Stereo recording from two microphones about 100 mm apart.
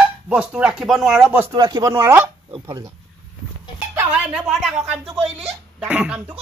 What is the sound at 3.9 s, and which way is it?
Speech, 15° right (ahead or behind).